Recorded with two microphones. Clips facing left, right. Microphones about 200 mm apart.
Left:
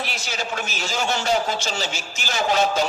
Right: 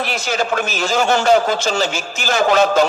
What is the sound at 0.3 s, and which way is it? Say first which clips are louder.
A man's voice: right 11 dB; 55° right (ahead or behind).